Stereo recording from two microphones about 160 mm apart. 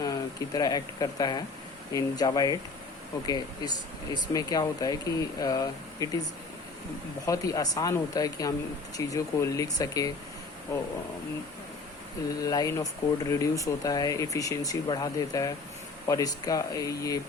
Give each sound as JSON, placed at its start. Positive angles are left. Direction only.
{"t": 0.0, "sound": "speech", "side_deg": 20}
{"t": 7.3, "sound": "speech", "side_deg": 20}
{"t": 12.4, "sound": "speech", "side_deg": 20}